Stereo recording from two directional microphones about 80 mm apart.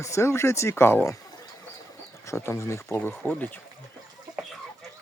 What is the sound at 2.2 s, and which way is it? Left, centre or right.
Speech, left.